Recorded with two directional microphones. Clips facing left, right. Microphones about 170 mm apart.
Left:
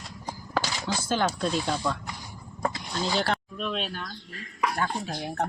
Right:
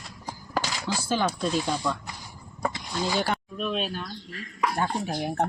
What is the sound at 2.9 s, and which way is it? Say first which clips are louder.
Speech: right 1 dB; 10° right (ahead or behind).